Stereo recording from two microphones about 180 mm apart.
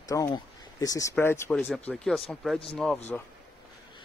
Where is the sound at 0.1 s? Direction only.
20° left (ahead or behind).